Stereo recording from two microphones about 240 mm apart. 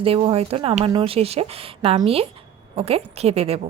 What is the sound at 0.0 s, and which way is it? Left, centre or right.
A woman's voice, right.